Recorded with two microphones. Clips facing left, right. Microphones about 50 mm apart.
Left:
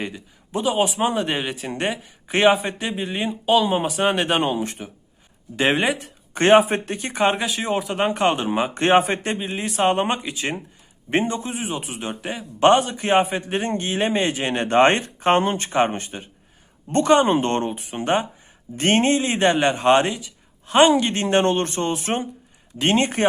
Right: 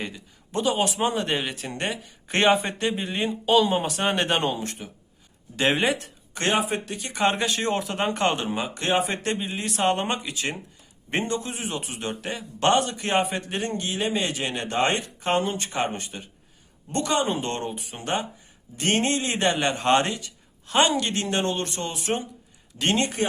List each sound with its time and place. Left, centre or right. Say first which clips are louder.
0.0 s a man's voice: left 4 dB; centre
6.3 s speech: left 9 dB; left
7.1 s a man's voice: left 3 dB; centre
7.3 s a man's voice: left 2 dB; centre
8.4 s speech: left 7 dB; left
9.1 s a man's voice: left 2 dB; centre
13.5 s a man's voice: left 5 dB; left
21.2 s speech: left 7 dB; left
22.8 s a man's voice: left 4 dB; left